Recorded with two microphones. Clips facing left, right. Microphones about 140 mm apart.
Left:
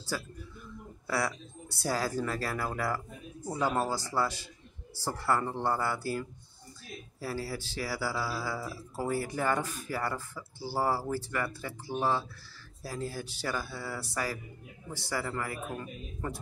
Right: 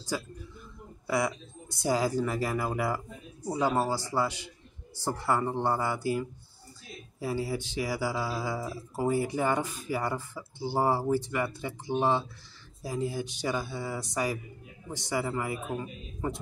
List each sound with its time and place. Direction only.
0.1 s speech: 10° right (ahead or behind)